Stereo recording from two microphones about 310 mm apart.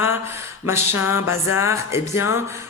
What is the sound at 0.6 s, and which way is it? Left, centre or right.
A woman's voice, centre.